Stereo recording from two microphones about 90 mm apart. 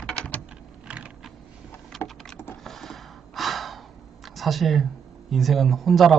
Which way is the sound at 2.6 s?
5° left (ahead or behind).